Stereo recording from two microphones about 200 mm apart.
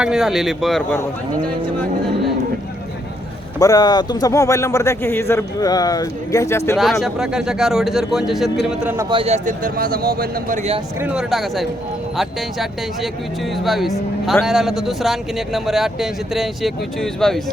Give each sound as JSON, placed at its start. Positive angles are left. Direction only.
{"t": 0.0, "sound": "speech", "side_deg": 0}
{"t": 3.6, "sound": "speech", "side_deg": 20}
{"t": 7.0, "sound": "a man's voice", "side_deg": -5}
{"t": 9.0, "sound": "speech", "side_deg": -30}
{"t": 11.0, "sound": "speech", "side_deg": -5}